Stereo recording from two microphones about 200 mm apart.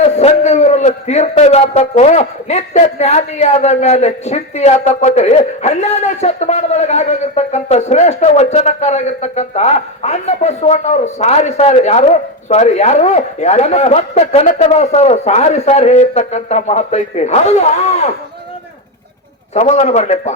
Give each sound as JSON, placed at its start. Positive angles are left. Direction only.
{"t": 0.0, "sound": "a man's voice", "side_deg": 35}
{"t": 19.5, "sound": "a man's voice", "side_deg": 35}